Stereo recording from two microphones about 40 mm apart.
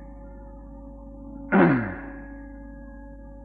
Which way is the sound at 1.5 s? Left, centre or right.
Centre.